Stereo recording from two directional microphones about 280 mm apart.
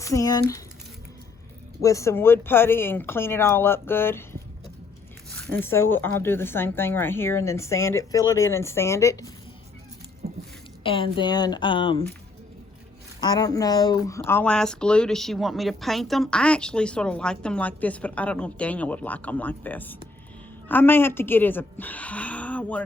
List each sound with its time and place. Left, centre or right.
0.0 s speech: centre
1.8 s speech: centre
5.5 s speech: centre
10.8 s speech: centre
13.1 s speech: centre